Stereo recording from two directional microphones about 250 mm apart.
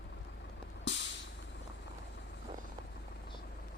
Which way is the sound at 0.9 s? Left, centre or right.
Left.